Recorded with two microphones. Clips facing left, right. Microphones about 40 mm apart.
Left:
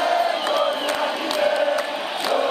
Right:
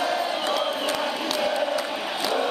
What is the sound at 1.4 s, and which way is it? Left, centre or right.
Chant, centre.